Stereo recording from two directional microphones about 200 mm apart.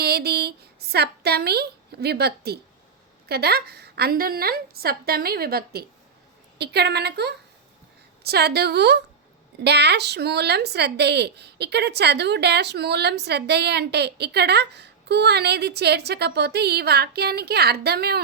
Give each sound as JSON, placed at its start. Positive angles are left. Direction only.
{"t": 0.0, "sound": "a woman's voice", "side_deg": -50}